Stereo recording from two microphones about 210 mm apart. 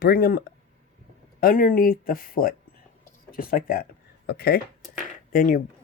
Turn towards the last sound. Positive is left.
turn(degrees=40)  # may be behind; listen again after turning